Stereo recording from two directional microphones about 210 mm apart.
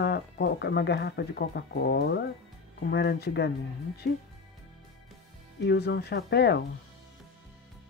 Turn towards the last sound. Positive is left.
turn(degrees=50)  # may be behind; listen again after turning